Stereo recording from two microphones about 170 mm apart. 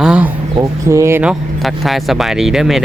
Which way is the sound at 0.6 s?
15° right (ahead or behind).